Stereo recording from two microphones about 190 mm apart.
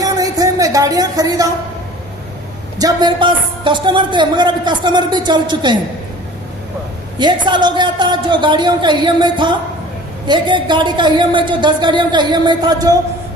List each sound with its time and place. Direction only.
0.0 s a sound: 20° right (ahead or behind)
2.7 s a woman's voice: 20° right (ahead or behind)
7.2 s a woman's voice: 25° right (ahead or behind)